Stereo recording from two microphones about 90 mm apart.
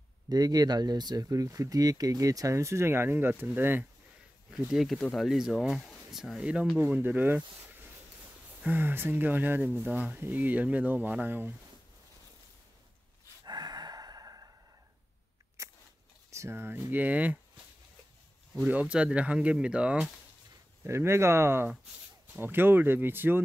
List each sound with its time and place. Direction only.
0.3 s speech: 45° right (ahead or behind); by 3.8 s 20° right (ahead or behind)
4.5 s speech: 5° right (ahead or behind)
8.6 s speech: 20° right (ahead or behind)
13.5 s sigh: 50° right (ahead or behind)
16.3 s speech: 30° right (ahead or behind)
18.6 s speech: 15° right (ahead or behind)
20.8 s speech: 30° right (ahead or behind)